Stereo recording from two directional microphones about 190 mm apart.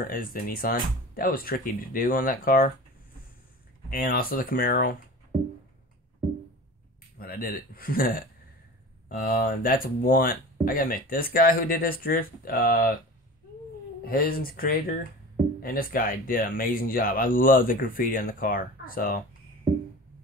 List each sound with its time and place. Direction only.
0.0 s speech: 50° left (ahead or behind)
3.9 s speech: 50° left (ahead or behind)
7.2 s speech: 50° left (ahead or behind)
14.0 s speech: 50° left (ahead or behind)